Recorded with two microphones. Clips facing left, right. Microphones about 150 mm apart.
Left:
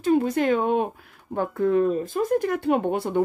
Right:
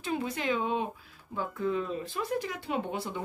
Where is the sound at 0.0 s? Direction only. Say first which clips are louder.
Left 11 dB; 45° left (ahead or behind).